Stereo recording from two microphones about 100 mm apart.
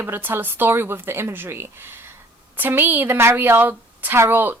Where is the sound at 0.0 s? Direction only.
20° right (ahead or behind).